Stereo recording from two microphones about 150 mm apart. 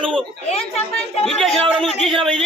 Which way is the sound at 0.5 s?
45° left (ahead or behind).